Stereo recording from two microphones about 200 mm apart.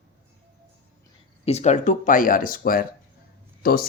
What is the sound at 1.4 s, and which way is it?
Speech, 35° left (ahead or behind).